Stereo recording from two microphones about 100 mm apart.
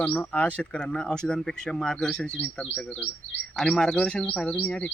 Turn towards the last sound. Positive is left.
turn(degrees=10)  # may be behind; listen again after turning